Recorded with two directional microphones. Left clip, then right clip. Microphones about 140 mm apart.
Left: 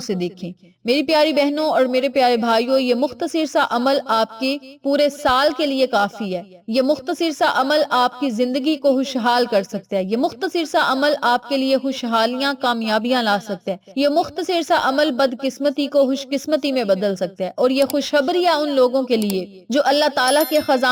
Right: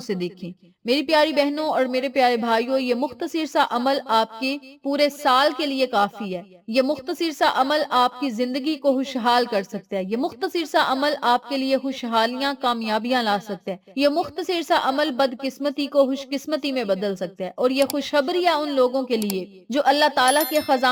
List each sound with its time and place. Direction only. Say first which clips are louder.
0.1 s speech: left 3 dB; 25° left (ahead or behind)